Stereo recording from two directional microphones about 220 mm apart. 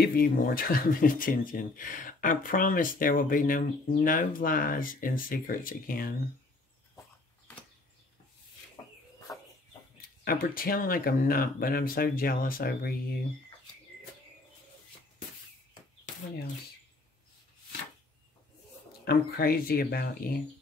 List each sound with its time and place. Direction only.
0.0 s speech: 40° left (ahead or behind)
9.3 s bird: 15° left (ahead or behind)
10.2 s speech: 40° left (ahead or behind)
19.0 s speech: 45° left (ahead or behind)